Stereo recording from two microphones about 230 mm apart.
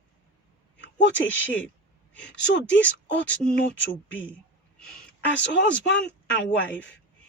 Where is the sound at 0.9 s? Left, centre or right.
Left.